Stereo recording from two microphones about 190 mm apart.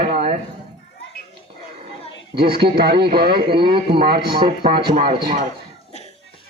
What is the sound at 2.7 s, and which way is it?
A man's voice, 55° right (ahead or behind).